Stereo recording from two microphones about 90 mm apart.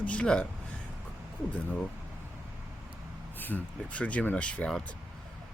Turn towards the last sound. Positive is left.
turn(degrees=15)  # may be behind; listen again after turning